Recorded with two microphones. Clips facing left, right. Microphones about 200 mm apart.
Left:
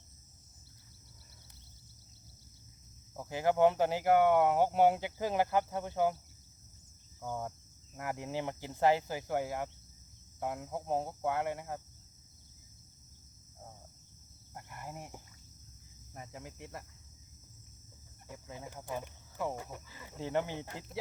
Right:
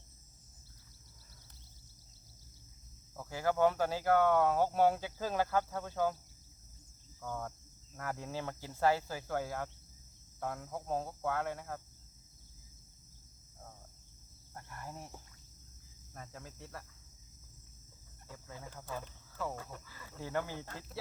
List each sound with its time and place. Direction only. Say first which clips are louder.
3.2 s speech: left 3 dB; 20° left (ahead or behind)
7.2 s speech: left 2 dB; 20° left (ahead or behind)
14.5 s cricket: left 1 dB; 15° left (ahead or behind)
16.1 s speech: left 3 dB; 15° left (ahead or behind)
18.3 s speech: left 3 dB; 20° left (ahead or behind)